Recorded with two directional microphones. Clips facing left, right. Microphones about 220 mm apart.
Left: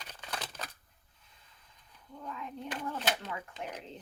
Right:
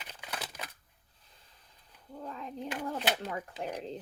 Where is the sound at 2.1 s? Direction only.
35° right (ahead or behind).